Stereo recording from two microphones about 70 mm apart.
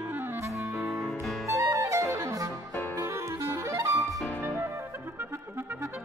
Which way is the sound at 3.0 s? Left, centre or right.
Right.